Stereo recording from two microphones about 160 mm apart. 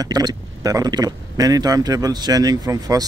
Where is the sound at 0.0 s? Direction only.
25° right (ahead or behind).